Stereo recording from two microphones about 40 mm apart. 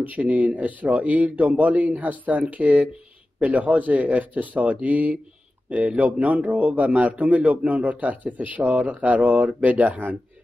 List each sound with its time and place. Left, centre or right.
0.0 s a man's voice: right